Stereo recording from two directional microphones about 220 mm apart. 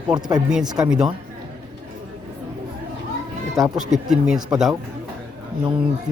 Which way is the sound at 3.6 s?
Centre (ahead or behind).